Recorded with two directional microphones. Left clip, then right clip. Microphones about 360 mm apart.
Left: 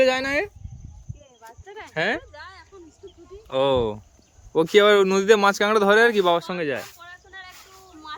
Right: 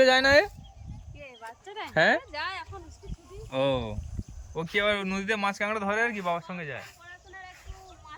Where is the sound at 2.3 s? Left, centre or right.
Right.